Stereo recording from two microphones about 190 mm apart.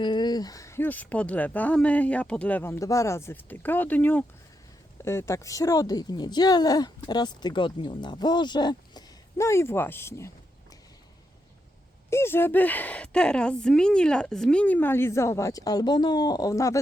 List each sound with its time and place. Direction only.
0.0 s a woman's voice: 25° left (ahead or behind)
12.1 s a woman's voice: 10° left (ahead or behind)